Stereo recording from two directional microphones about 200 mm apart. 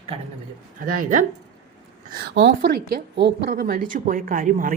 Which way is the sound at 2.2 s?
55° right (ahead or behind).